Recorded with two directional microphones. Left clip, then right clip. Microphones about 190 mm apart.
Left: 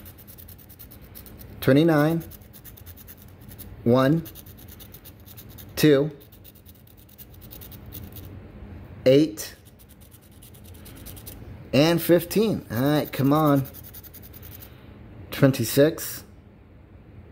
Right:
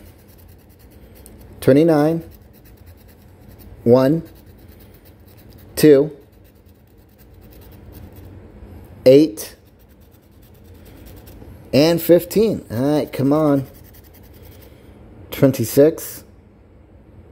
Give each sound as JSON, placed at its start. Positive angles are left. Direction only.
{"t": 1.6, "sound": "speech", "side_deg": -15}
{"t": 5.8, "sound": "speech", "side_deg": -15}
{"t": 9.0, "sound": "speech", "side_deg": -15}
{"t": 11.7, "sound": "speech", "side_deg": -15}
{"t": 15.2, "sound": "speech", "side_deg": -10}